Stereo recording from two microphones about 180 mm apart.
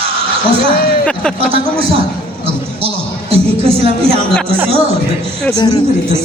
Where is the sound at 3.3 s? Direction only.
30° right (ahead or behind).